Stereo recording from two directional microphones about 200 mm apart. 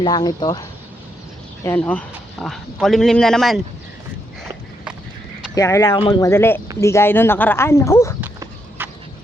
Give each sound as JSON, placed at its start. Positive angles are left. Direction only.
{"t": 0.0, "sound": "speech", "side_deg": 20}
{"t": 1.6, "sound": "a man's voice", "side_deg": 10}
{"t": 5.5, "sound": "speech", "side_deg": 15}
{"t": 8.8, "sound": "a sound", "side_deg": -10}